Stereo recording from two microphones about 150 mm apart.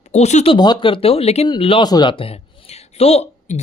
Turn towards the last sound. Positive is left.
turn(degrees=45)  # may be behind; listen again after turning